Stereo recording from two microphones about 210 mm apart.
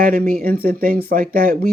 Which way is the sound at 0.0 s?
40° right (ahead or behind).